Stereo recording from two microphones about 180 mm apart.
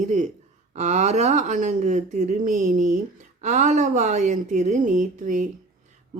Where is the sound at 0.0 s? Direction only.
40° right (ahead or behind).